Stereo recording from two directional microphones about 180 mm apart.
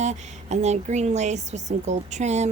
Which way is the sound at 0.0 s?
40° right (ahead or behind).